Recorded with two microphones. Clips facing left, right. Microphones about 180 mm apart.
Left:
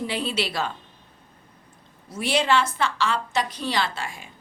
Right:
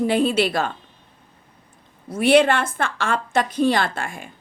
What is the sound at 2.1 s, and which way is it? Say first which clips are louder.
Speech: right 7 dB; 60° right (ahead or behind).